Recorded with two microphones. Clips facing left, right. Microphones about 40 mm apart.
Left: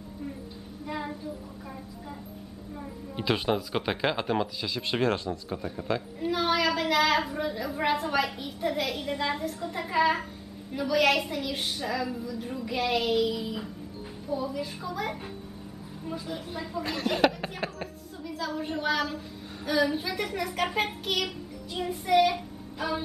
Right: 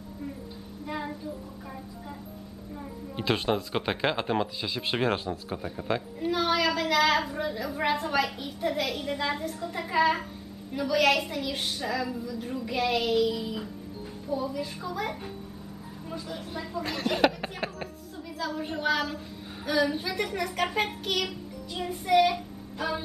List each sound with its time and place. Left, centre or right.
0.8 s a sound: centre
2.8 s speech: centre
21.7 s child singing: centre